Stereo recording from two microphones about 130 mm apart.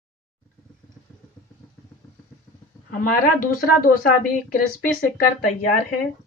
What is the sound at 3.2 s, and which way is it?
Speech, 90° left.